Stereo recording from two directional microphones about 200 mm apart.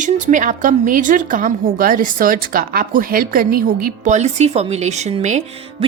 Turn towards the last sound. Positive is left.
turn(degrees=-35)  # may be behind; listen again after turning